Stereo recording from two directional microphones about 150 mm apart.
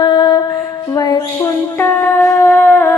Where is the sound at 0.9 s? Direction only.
25° left (ahead or behind).